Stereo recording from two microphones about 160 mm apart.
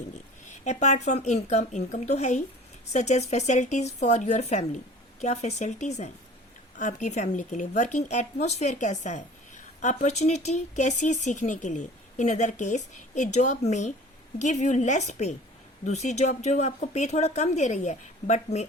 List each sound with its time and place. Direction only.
0.5 s speech: 45° left (ahead or behind)